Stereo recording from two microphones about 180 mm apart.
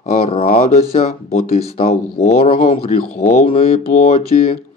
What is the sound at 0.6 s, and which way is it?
Speech, 40° left (ahead or behind).